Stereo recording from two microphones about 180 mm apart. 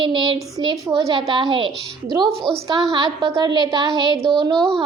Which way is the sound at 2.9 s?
25° right (ahead or behind).